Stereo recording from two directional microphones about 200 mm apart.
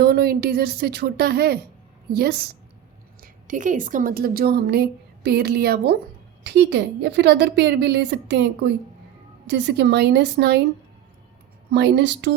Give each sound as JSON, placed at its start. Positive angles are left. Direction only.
{"t": 0.0, "sound": "a woman's voice", "side_deg": -55}
{"t": 3.2, "sound": "speech", "side_deg": -40}
{"t": 11.7, "sound": "speech", "side_deg": -55}